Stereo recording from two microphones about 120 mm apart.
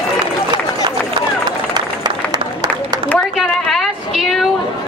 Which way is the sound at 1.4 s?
35° right (ahead or behind).